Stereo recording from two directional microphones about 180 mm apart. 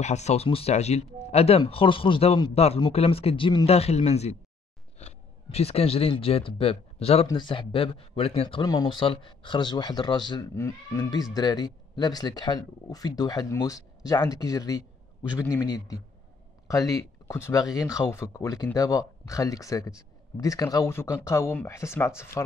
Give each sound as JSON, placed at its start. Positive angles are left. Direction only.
{"t": 0.0, "sound": "speech", "side_deg": 40}